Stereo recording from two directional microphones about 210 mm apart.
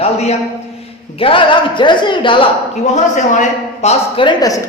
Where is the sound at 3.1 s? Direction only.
35° left (ahead or behind); by 4.6 s 20° left (ahead or behind).